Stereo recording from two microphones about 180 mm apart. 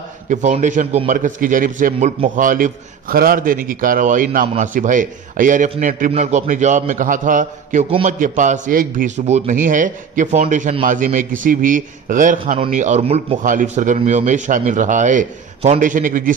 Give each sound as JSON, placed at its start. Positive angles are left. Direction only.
{"t": 0.3, "sound": "a man's voice", "side_deg": -40}
{"t": 13.4, "sound": "a man's voice", "side_deg": -45}